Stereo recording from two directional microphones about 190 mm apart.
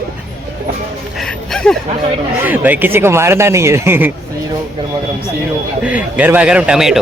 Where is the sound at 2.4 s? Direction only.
10° right (ahead or behind).